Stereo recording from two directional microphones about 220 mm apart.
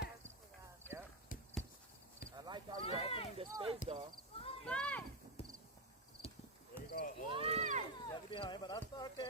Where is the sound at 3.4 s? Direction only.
25° right (ahead or behind).